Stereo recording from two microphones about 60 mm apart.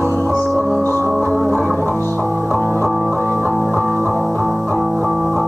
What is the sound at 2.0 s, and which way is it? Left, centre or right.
Music, left.